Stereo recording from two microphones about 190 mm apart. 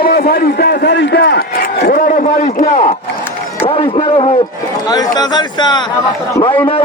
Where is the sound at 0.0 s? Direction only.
55° left (ahead or behind); by 2.9 s 35° left (ahead or behind).